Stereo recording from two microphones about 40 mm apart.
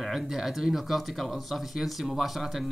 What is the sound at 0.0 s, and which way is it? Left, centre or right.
Speech, centre.